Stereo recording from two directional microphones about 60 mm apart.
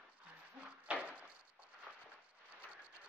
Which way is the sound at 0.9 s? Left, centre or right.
Right.